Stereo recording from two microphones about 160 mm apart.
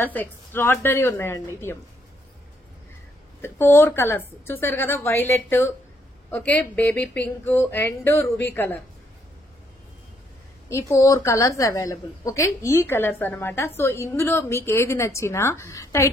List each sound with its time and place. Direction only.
0.0 s a woman's voice: 10° left (ahead or behind)
3.3 s a woman's voice: 15° left (ahead or behind)
10.7 s a woman's voice: 20° left (ahead or behind)